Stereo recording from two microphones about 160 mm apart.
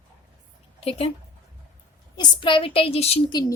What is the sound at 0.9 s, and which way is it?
Speech, 35° left (ahead or behind).